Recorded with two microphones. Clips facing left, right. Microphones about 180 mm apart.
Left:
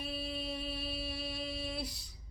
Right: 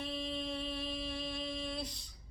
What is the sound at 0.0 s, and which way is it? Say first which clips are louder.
Music: right 1 dB; 10° left (ahead or behind).